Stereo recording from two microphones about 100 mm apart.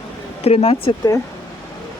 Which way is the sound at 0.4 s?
90° left.